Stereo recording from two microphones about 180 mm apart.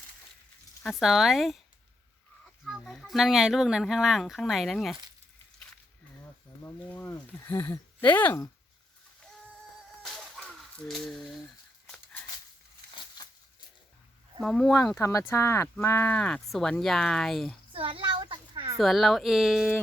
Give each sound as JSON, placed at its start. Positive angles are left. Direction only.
{"t": 0.8, "sound": "speech", "side_deg": 0}
{"t": 2.6, "sound": "speech", "side_deg": 0}
{"t": 6.6, "sound": "speech", "side_deg": 15}
{"t": 10.0, "sound": "music", "side_deg": 0}
{"t": 10.8, "sound": "speech", "side_deg": 0}
{"t": 12.9, "sound": "a sound", "side_deg": 25}
{"t": 14.4, "sound": "speech", "side_deg": 0}
{"t": 14.9, "sound": "speech", "side_deg": 15}
{"t": 17.7, "sound": "a sound", "side_deg": -30}
{"t": 18.8, "sound": "speech", "side_deg": 0}